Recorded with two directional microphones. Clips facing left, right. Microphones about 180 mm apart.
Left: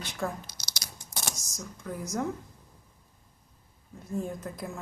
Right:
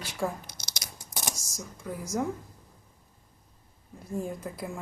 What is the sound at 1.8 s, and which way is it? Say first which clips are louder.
Speech: right 1 dB; 10° right (ahead or behind).